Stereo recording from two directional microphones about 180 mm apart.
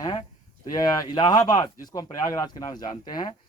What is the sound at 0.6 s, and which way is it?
Speech, 20° left (ahead or behind).